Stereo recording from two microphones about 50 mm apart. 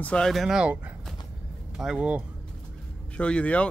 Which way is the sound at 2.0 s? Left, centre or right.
Right.